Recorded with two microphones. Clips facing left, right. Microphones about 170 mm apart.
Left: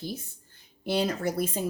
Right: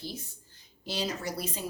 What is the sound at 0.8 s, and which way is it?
Speech, 55° left (ahead or behind).